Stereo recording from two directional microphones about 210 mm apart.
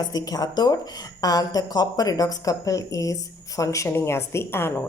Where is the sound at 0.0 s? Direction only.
20° left (ahead or behind).